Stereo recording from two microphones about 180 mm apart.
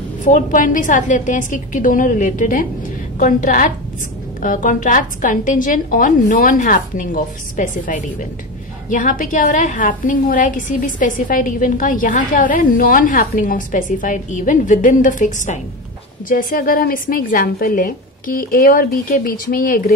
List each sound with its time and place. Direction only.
0.2 s a woman's voice: 45° left (ahead or behind)